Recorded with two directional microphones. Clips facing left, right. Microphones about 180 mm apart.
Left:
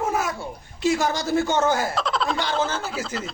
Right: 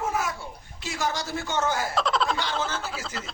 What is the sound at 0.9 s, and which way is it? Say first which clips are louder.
Speech: left 8 dB; 55° left (ahead or behind).